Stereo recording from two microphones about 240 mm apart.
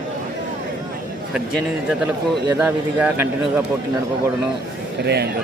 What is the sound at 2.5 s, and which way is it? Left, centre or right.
Speech, centre.